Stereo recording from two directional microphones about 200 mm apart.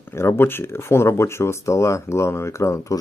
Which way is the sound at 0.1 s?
15° left (ahead or behind).